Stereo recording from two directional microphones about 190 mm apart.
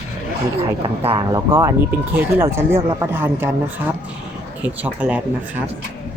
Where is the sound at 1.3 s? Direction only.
15° right (ahead or behind).